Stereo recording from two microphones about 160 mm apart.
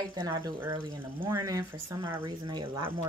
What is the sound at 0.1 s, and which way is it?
Speech, 25° right (ahead or behind).